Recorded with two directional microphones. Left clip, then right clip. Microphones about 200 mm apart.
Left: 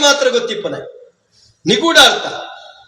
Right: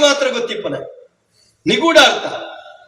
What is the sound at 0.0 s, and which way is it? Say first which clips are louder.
Speech: left 2 dB; 45° left (ahead or behind).